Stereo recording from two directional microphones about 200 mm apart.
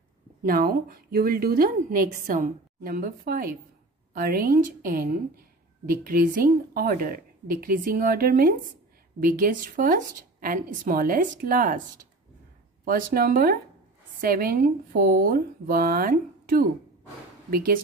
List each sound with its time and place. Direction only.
0.4 s a woman's voice: 45° right (ahead or behind)
12.8 s a woman's voice: 45° right (ahead or behind)